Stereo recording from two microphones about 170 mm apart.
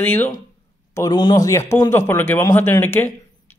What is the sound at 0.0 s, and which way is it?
Speech, 10° left (ahead or behind).